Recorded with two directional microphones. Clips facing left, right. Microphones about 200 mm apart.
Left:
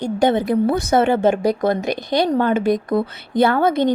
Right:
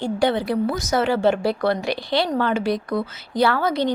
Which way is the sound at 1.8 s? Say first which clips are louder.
Left 3 dB; 45° left (ahead or behind).